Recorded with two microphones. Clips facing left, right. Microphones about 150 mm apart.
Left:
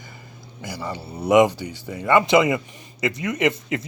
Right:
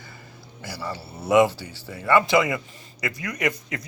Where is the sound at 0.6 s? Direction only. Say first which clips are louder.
Left 2 dB; 15° left (ahead or behind).